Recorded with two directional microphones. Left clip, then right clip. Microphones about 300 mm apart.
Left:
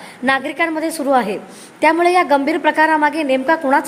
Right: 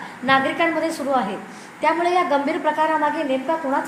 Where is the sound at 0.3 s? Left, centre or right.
Left.